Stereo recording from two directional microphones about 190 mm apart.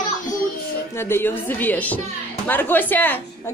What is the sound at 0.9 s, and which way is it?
A woman's voice, 10° left (ahead or behind).